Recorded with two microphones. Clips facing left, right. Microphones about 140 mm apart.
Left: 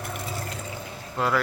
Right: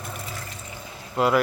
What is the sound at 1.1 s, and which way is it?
Speech, 15° right (ahead or behind).